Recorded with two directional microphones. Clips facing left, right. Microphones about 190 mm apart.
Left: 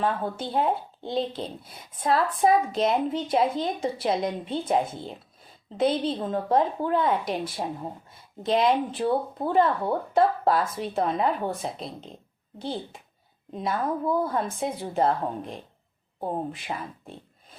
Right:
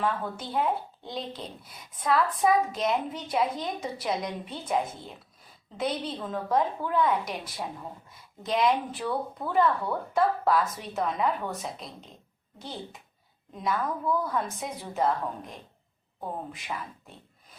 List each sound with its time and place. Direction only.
0.0 s speech: 30° left (ahead or behind)